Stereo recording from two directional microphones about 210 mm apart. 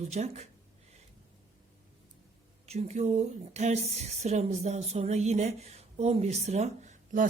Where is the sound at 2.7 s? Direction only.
30° right (ahead or behind).